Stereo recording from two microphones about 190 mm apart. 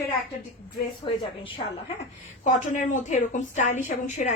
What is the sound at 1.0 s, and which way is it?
Speech, 25° left (ahead or behind).